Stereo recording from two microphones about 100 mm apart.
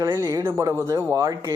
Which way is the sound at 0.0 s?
30° right (ahead or behind).